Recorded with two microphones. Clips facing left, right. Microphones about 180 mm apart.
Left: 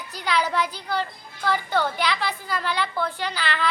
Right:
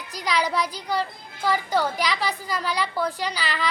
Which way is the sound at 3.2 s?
40° right (ahead or behind).